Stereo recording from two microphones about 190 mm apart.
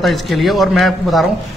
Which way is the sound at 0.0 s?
Centre (ahead or behind).